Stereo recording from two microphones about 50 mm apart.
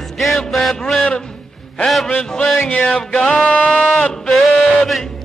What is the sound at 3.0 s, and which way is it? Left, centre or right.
Music, centre.